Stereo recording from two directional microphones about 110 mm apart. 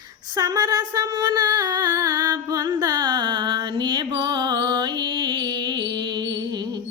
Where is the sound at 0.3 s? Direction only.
35° right (ahead or behind).